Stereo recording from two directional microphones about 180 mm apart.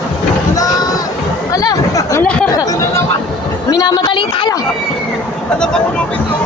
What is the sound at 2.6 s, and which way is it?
Chatter, 20° left (ahead or behind).